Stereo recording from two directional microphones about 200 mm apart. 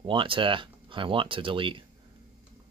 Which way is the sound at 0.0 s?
25° right (ahead or behind).